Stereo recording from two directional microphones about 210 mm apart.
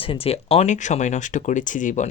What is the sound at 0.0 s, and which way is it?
Speech, 25° left (ahead or behind).